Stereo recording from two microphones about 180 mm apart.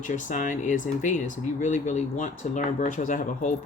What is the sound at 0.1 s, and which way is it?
Speech, 45° left (ahead or behind).